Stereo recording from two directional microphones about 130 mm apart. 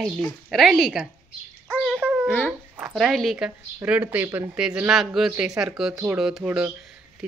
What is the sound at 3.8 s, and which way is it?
A man's voice, 10° right (ahead or behind).